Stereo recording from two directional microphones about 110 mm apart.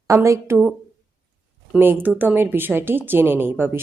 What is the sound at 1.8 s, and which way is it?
Speech, 20° right (ahead or behind).